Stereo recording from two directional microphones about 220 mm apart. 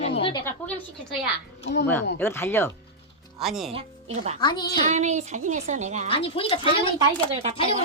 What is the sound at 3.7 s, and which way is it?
Speech, 30° right (ahead or behind).